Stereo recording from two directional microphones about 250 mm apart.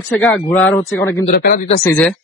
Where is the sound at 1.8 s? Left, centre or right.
Centre.